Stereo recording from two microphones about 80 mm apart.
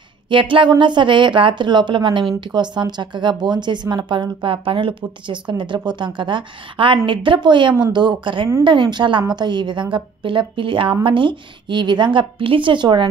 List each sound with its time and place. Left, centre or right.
0.3 s a woman's voice: right
7.8 s a woman's voice: right
9.3 s a woman's voice: right